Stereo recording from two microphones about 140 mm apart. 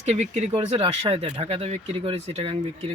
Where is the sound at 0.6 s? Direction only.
40° right (ahead or behind).